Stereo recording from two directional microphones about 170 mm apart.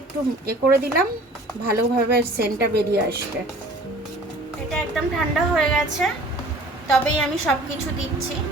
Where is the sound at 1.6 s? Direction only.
65° right (ahead or behind).